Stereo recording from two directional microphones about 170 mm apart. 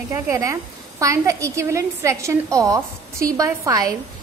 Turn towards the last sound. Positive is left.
turn(degrees=-20)  # may be behind; listen again after turning